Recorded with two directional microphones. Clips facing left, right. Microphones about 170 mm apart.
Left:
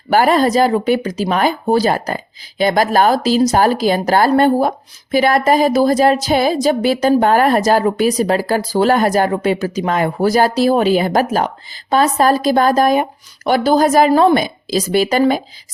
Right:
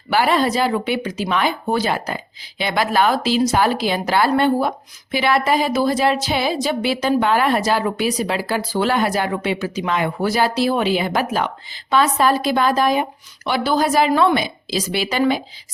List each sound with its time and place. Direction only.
0.1 s speech: 45° left (ahead or behind)